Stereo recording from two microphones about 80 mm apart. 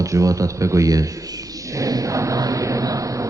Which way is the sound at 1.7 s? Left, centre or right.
Right.